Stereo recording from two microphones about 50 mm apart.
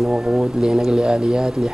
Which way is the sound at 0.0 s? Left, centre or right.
Centre.